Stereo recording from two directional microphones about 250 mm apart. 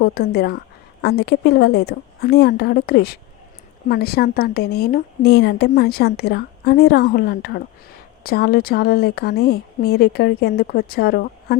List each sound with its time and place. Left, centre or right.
0.0 s a woman's voice: left